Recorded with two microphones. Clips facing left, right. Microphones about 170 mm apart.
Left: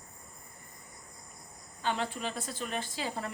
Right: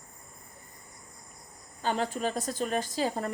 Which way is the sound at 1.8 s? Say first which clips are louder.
Right 4 dB; 40° right (ahead or behind).